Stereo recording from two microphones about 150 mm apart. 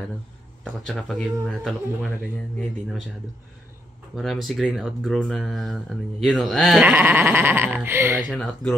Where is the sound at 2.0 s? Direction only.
15° left (ahead or behind).